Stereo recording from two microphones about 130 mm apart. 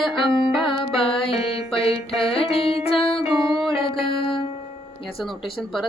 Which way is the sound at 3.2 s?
Centre (ahead or behind).